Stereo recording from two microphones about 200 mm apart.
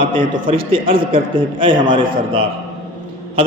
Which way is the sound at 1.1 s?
25° right (ahead or behind).